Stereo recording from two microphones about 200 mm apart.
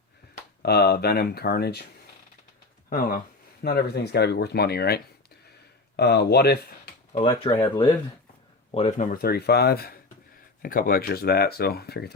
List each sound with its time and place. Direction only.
0.6 s speech: 55° left (ahead or behind)
2.9 s speech: 45° left (ahead or behind)
7.3 s speech: 20° left (ahead or behind)
8.7 s speech: 35° left (ahead or behind); by 12.1 s 55° left (ahead or behind)